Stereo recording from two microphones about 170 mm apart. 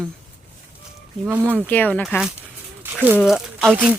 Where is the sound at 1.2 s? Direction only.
10° right (ahead or behind).